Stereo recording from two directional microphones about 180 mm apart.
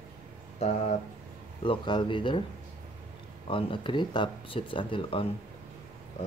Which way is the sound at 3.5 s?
30° left (ahead or behind).